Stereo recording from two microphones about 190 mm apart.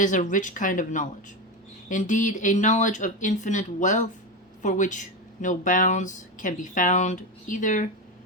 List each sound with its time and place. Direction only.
0.0 s speech: 40° left (ahead or behind)